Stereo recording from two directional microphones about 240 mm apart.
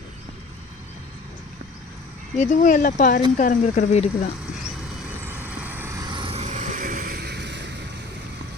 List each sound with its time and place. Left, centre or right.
2.3 s speech: left
5.2 s vehicle: centre; by 7.6 s right